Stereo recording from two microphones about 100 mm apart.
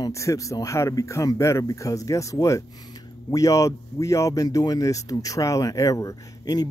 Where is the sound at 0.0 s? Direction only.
30° left (ahead or behind).